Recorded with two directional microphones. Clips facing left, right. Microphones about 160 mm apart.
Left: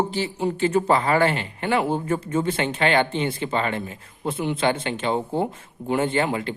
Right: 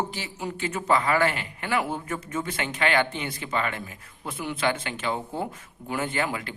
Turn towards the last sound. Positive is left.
turn(degrees=25)  # may be behind; listen again after turning